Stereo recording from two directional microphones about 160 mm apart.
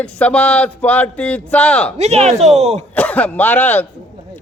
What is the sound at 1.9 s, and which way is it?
Speech, 40° right (ahead or behind).